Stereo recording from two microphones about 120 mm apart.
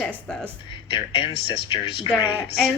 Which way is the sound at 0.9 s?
50° left (ahead or behind).